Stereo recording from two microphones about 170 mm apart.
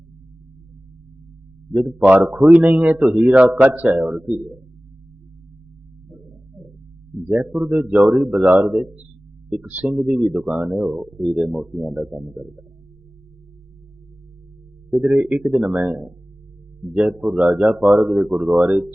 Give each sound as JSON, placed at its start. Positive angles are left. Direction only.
{"t": 1.7, "sound": "a man's voice", "side_deg": -5}
{"t": 7.3, "sound": "a man's voice", "side_deg": 0}
{"t": 14.8, "sound": "speech", "side_deg": 0}